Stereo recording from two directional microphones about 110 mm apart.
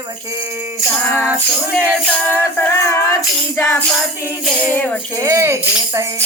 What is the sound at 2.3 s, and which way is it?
Music, 20° left (ahead or behind).